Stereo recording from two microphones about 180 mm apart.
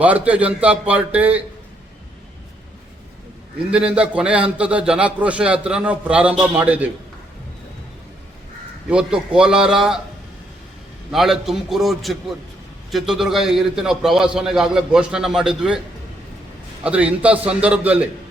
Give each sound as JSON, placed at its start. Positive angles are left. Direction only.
{"t": 0.0, "sound": "a man's voice", "side_deg": -10}
{"t": 3.7, "sound": "a man's voice", "side_deg": -5}
{"t": 8.9, "sound": "a man's voice", "side_deg": -5}
{"t": 11.1, "sound": "a man's voice", "side_deg": 0}
{"t": 16.8, "sound": "a man's voice", "side_deg": -5}